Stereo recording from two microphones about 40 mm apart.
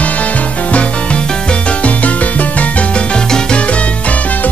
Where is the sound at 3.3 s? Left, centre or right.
Left.